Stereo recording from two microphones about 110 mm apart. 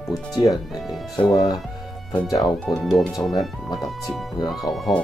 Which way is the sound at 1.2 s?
50° left (ahead or behind).